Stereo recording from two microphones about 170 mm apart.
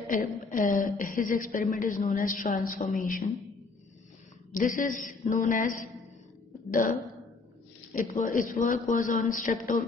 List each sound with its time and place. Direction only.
0.1 s a woman's voice: 55° left (ahead or behind)
4.5 s a man's voice: 50° left (ahead or behind)
7.9 s a woman's voice: 50° left (ahead or behind)